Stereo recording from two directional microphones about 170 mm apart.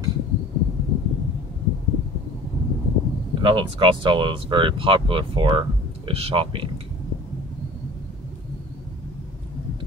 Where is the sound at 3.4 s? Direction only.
30° right (ahead or behind).